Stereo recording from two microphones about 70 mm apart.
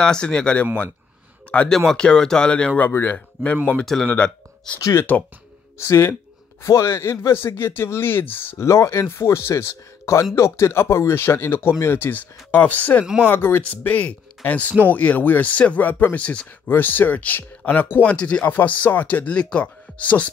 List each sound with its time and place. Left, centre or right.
0.0 s speech: centre
1.9 s speech: centre; by 3.5 s left
3.7 s speech: centre
4.1 s speech: left
5.9 s speech: left
8.5 s speech: left